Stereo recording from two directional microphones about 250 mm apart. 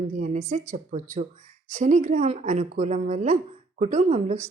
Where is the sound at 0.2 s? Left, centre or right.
Right.